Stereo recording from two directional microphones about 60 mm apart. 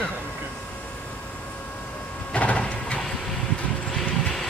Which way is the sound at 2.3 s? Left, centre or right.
Left.